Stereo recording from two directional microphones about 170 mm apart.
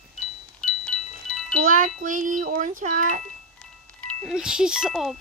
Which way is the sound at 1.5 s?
55° right (ahead or behind).